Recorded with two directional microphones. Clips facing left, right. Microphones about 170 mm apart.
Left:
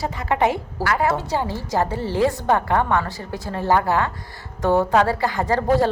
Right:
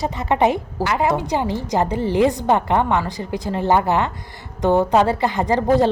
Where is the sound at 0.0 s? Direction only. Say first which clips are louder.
Right 3 dB; 20° right (ahead or behind).